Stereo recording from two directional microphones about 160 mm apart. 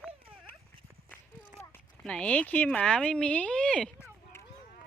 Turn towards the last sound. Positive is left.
turn(degrees=15)  # may be behind; listen again after turning